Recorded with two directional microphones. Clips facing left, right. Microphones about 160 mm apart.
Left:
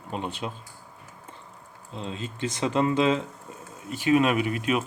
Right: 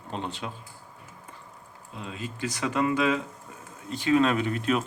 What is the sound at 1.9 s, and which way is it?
Speech, 25° left (ahead or behind).